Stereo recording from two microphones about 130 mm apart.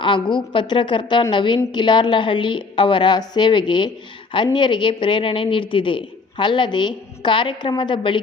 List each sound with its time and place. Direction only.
0.0 s speech: 40° left (ahead or behind)